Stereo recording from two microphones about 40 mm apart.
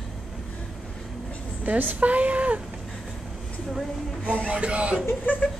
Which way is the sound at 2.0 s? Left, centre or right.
Right.